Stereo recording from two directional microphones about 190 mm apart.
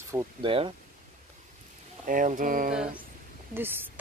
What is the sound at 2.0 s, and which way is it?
Speech, 45° right (ahead or behind).